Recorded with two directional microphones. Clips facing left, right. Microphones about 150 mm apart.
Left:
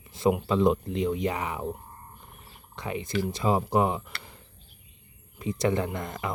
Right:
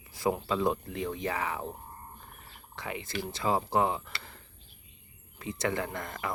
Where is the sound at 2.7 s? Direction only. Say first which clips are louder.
Left 5 dB; 20° left (ahead or behind).